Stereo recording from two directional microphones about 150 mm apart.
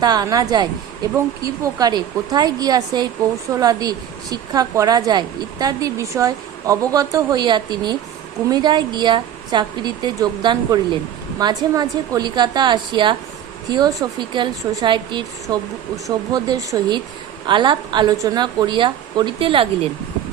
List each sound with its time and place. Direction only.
0.0 s a woman's voice: 25° right (ahead or behind)